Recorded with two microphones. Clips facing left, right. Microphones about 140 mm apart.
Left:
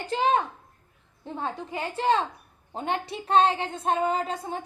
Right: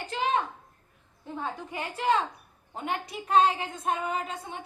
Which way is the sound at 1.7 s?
30° left (ahead or behind).